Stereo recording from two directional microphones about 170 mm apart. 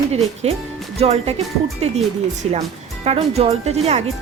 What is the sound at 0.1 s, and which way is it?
Speech, 40° right (ahead or behind).